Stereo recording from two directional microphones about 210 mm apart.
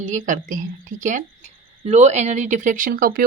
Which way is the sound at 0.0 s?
35° right (ahead or behind).